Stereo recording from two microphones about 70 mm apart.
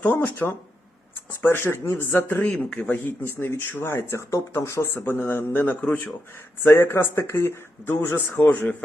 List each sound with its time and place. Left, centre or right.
0.0 s speech: left